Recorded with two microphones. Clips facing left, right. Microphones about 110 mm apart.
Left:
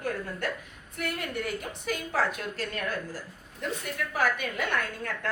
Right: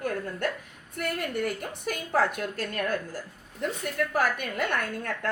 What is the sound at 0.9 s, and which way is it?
A woman's voice, 50° right (ahead or behind).